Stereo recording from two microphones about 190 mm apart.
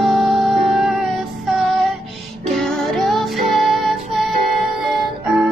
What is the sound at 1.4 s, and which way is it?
Child singing, centre (ahead or behind).